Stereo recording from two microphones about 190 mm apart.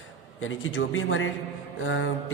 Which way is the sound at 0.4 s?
90° left.